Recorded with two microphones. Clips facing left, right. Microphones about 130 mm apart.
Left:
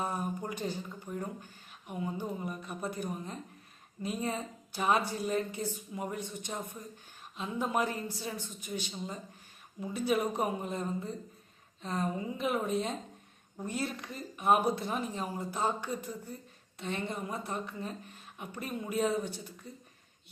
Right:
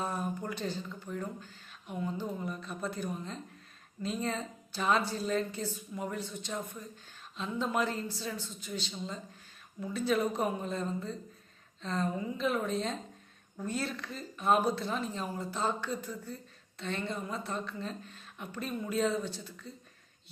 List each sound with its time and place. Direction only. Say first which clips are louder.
0.0 s a woman's voice: even; 15° left (ahead or behind)